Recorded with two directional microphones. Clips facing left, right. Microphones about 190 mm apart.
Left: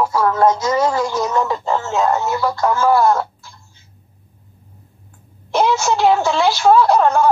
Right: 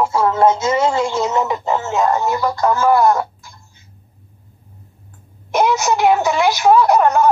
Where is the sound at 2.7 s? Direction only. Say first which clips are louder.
Right 1 dB; 20° right (ahead or behind).